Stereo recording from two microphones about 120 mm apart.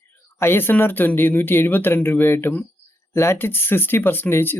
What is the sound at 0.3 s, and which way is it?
Speech, 20° left (ahead or behind).